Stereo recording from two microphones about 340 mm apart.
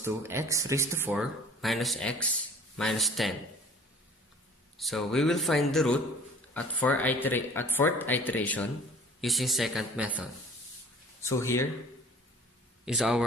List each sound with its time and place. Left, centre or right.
0.0 s speech: centre
4.8 s speech: centre
11.2 s speech: centre
12.8 s speech: centre